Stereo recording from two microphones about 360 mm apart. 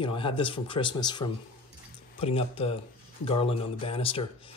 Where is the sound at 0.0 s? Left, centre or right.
Centre.